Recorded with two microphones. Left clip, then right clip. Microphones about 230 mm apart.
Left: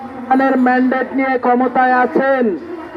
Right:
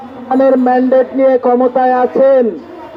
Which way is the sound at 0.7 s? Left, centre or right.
Centre.